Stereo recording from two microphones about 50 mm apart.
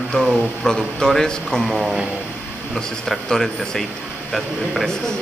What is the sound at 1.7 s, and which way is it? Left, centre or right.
Speech, centre.